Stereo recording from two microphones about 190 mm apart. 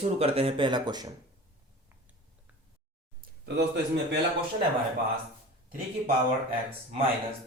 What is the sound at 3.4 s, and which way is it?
Speech, 65° right (ahead or behind).